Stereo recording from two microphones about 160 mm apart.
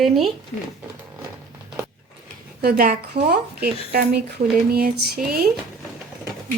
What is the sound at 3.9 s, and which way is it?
Speech, 85° right.